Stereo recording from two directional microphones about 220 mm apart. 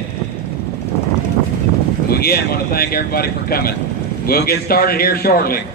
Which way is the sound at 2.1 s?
45° left (ahead or behind).